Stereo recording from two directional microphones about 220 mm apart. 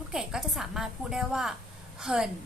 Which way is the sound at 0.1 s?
Centre (ahead or behind).